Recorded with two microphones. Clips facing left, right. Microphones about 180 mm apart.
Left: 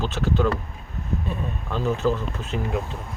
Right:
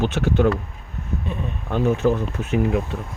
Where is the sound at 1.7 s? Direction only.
55° right (ahead or behind).